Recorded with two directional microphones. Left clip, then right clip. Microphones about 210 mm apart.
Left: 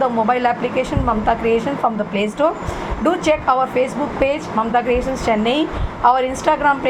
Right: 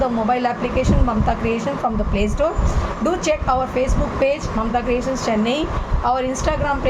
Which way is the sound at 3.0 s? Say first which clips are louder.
Left 4 dB; 10° left (ahead or behind).